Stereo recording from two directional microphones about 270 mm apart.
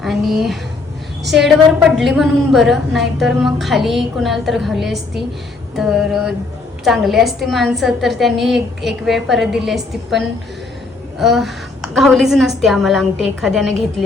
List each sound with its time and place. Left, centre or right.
0.0 s a woman's voice: centre